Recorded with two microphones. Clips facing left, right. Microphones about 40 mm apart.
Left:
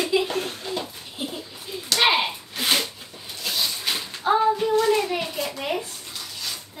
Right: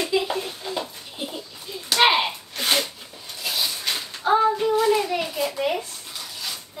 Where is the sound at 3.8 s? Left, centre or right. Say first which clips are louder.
Right 1 dB; centre.